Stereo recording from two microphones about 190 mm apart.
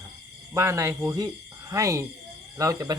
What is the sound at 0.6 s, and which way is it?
Speech, 15° right (ahead or behind).